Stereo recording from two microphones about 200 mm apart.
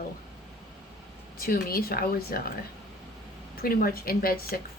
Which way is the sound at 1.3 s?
45° left (ahead or behind).